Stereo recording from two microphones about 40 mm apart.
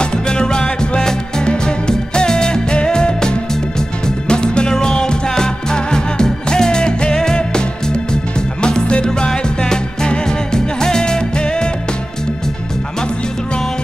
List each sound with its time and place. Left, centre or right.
0.0 s music: left
8.6 s music: left